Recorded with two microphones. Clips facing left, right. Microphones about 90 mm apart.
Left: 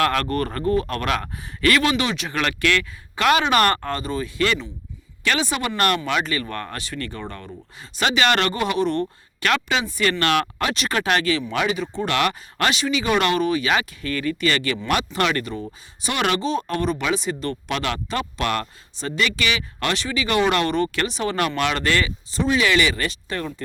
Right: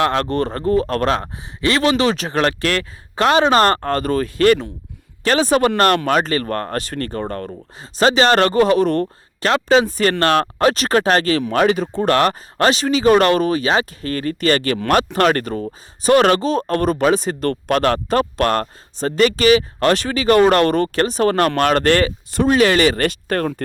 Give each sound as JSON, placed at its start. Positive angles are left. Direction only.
{"t": 0.0, "sound": "a man's voice", "side_deg": -30}
{"t": 7.8, "sound": "a man's voice", "side_deg": -35}